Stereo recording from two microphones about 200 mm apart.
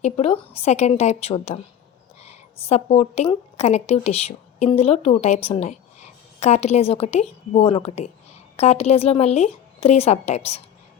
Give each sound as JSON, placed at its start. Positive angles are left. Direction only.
{"t": 0.0, "sound": "a woman's voice", "side_deg": 30}